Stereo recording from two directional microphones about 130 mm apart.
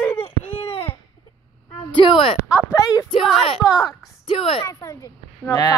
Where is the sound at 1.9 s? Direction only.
40° left (ahead or behind).